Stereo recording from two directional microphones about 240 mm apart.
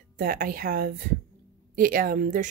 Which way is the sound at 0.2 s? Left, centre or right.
Right.